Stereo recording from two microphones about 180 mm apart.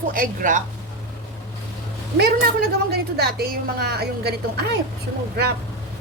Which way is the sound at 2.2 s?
60° right (ahead or behind).